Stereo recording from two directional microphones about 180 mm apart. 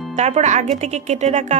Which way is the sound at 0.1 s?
40° right (ahead or behind).